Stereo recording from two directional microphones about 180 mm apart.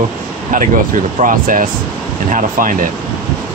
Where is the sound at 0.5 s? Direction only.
45° right (ahead or behind).